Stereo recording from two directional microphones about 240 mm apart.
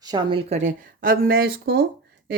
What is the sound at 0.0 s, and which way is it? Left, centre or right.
A woman's voice, centre.